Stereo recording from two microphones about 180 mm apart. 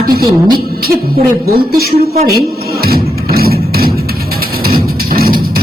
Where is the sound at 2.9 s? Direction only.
60° right (ahead or behind).